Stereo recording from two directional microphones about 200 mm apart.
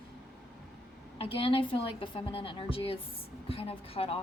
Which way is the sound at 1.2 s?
25° left (ahead or behind).